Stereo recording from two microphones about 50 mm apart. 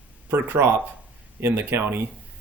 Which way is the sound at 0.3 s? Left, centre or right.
Right.